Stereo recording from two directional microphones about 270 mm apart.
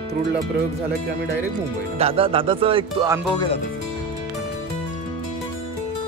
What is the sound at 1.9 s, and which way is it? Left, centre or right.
Speech, right.